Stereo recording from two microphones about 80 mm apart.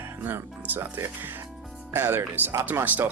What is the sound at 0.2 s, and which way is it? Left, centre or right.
Speech, right.